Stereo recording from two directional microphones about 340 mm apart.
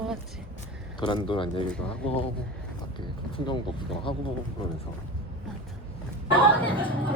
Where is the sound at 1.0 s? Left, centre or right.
Centre.